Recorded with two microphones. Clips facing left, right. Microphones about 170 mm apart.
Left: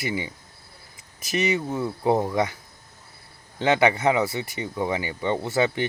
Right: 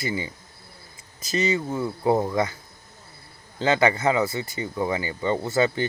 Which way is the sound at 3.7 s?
15° left (ahead or behind).